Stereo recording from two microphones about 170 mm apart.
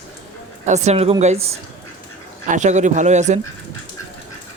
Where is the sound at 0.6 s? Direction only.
40° right (ahead or behind).